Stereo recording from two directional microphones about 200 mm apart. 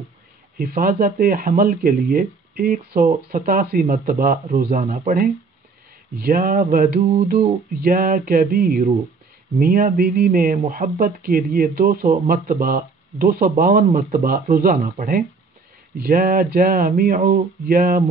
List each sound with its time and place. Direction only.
0.6 s speech: 50° right (ahead or behind)